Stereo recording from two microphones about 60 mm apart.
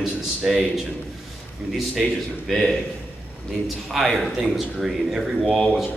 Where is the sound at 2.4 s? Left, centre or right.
Centre.